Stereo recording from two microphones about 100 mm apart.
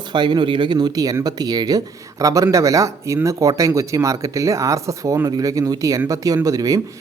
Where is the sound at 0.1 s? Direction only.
50° right (ahead or behind).